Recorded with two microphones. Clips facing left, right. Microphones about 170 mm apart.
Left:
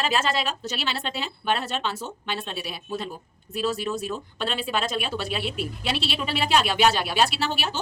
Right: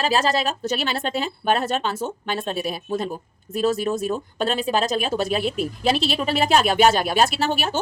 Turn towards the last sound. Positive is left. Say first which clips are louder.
# right 5 dB
turn(degrees=-50)  # may be behind; listen again after turning